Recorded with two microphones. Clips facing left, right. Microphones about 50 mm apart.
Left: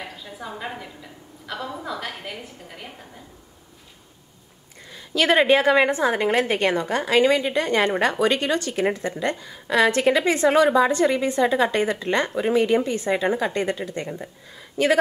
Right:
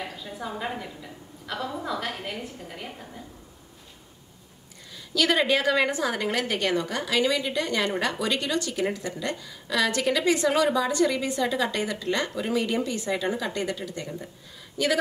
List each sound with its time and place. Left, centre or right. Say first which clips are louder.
0.0 s a woman's voice: right 1 dB; centre
4.9 s a woman's voice: left 5 dB; left